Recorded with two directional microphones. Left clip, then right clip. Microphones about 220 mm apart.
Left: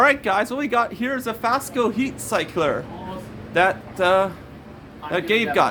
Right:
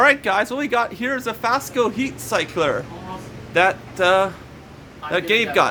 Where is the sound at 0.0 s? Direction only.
5° right (ahead or behind).